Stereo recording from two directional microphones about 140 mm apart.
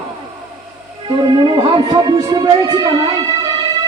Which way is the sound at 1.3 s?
35° right (ahead or behind).